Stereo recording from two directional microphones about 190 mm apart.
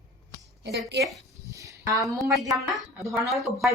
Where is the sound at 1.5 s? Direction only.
15° right (ahead or behind).